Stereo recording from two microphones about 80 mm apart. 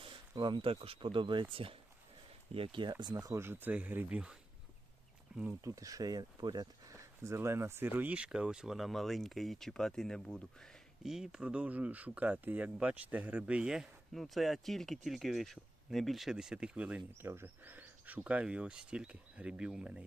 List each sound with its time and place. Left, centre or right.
0.0 s speech: right
2.7 s speech: right
3.3 s speech: right; by 5.5 s centre
5.6 s speech: right
6.9 s speech: right; by 10.8 s centre
11.0 s speech: centre
14.1 s speech: centre
17.2 s speech: right; by 20.1 s centre